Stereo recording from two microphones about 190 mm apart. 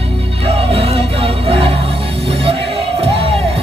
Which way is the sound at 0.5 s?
30° right (ahead or behind).